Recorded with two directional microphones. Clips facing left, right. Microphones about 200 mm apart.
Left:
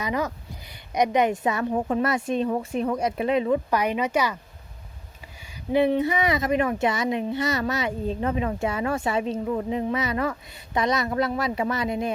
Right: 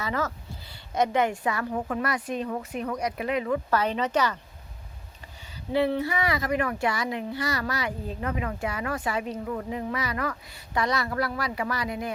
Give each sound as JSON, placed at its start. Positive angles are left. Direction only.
{"t": 0.0, "sound": "a child's voice", "side_deg": 15}
{"t": 5.7, "sound": "a child's voice", "side_deg": 20}